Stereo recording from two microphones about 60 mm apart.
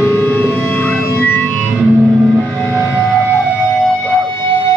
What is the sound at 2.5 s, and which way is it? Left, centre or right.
Music, left.